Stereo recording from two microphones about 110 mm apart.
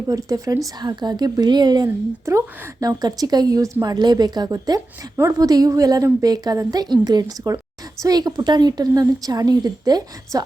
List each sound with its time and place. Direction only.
0.1 s a woman's voice: 30° right (ahead or behind)
2.3 s a woman's voice: 30° right (ahead or behind)